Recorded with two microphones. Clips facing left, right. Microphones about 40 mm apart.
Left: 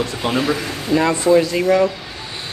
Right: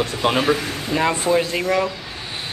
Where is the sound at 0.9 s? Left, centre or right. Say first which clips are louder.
Left 5 dB; centre.